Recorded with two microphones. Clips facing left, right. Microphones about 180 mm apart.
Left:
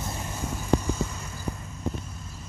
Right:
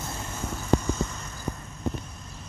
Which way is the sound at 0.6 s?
10° left (ahead or behind).